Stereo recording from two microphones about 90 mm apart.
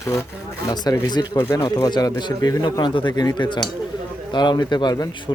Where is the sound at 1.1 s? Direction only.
50° left (ahead or behind).